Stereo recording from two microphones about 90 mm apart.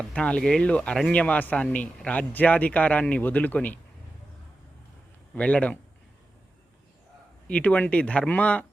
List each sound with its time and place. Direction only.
0.0 s speech: 10° left (ahead or behind)
5.3 s speech: 15° left (ahead or behind)
7.4 s speech: 15° left (ahead or behind)